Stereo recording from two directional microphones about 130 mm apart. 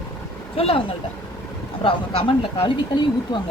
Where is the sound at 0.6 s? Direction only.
45° left (ahead or behind).